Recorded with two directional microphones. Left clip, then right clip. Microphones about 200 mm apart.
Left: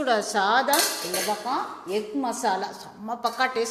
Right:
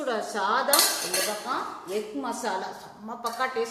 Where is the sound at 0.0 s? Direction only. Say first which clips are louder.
Left 5 dB; 45° left (ahead or behind).